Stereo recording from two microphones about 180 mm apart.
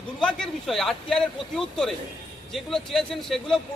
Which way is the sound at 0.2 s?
5° left (ahead or behind).